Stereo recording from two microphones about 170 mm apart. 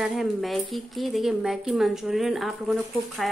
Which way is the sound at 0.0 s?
Centre (ahead or behind).